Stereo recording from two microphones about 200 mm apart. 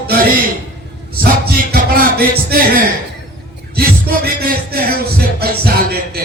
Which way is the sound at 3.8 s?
50° right (ahead or behind).